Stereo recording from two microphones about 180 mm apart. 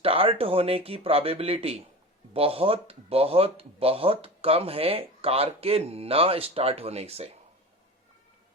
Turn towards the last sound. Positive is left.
turn(degrees=-35)  # may be behind; listen again after turning